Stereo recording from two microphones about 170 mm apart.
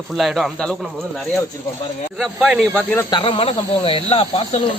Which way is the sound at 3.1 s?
30° left (ahead or behind).